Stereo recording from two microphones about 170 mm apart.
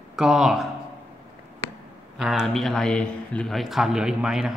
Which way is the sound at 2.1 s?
Centre (ahead or behind).